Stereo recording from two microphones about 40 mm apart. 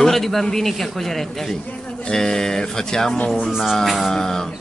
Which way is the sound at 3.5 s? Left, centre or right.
Centre.